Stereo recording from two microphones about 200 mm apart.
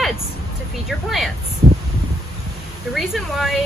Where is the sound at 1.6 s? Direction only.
40° right (ahead or behind).